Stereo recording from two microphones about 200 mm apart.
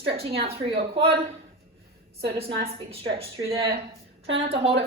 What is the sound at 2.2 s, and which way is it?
A woman's voice, 25° right (ahead or behind).